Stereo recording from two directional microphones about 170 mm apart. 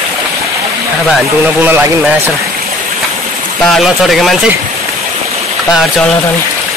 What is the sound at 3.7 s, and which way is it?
Speech, centre (ahead or behind).